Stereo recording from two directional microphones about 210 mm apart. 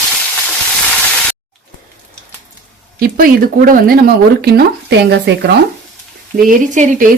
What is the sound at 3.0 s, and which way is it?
Speech, 45° right (ahead or behind).